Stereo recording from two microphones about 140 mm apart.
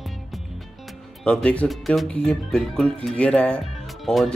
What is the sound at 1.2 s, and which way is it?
Speech, 10° left (ahead or behind).